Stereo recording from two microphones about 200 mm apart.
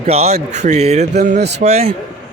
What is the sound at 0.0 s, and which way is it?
Speech, 30° right (ahead or behind).